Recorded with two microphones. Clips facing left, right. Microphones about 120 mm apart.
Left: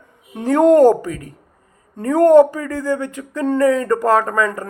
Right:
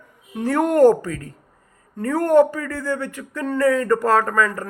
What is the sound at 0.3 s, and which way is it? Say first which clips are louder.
Speech: left 5 dB; 20° left (ahead or behind).